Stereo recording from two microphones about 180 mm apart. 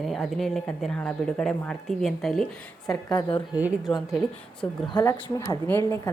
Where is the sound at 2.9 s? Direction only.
25° left (ahead or behind).